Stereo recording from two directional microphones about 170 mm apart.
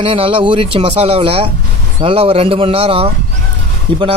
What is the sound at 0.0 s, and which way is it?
Speech, 30° right (ahead or behind).